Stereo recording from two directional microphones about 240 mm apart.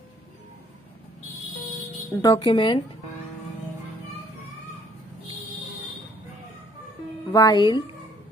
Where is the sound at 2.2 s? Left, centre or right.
Centre.